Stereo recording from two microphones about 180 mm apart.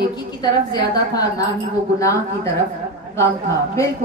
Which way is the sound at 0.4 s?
20° left (ahead or behind).